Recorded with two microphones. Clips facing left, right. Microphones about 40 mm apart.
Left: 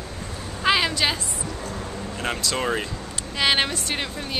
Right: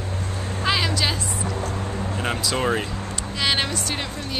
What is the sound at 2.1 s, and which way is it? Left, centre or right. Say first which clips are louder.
Speech: right 1 dB; centre.